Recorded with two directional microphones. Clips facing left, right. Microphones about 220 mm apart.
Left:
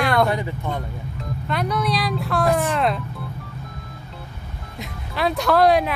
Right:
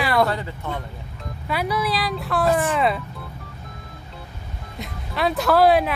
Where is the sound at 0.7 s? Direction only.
5° right (ahead or behind).